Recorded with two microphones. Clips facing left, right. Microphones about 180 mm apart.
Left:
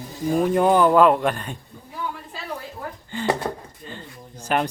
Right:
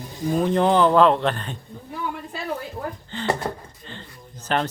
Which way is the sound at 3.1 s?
10° left (ahead or behind).